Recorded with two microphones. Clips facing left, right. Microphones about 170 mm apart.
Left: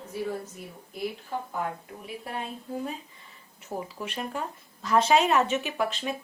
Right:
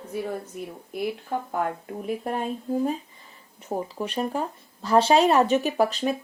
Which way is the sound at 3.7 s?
30° right (ahead or behind).